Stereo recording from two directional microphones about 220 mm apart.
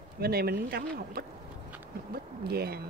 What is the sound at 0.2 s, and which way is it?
Speech, 45° right (ahead or behind).